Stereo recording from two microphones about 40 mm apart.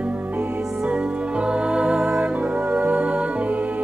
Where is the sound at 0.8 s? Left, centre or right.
Right.